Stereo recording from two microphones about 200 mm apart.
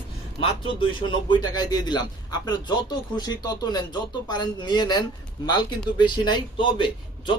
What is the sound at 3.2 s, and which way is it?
Speech, 20° left (ahead or behind).